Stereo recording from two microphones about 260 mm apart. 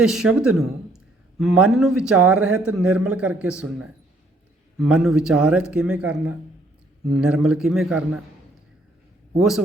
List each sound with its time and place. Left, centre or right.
0.0 s a man's voice: centre
9.4 s a man's voice: centre